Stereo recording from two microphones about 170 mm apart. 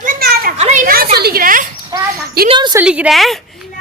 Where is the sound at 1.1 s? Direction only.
65° right (ahead or behind).